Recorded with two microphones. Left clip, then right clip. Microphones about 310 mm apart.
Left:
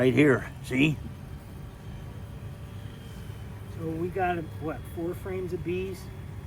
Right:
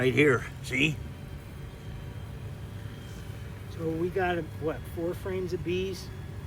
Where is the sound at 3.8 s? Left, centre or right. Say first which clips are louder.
Even; centre.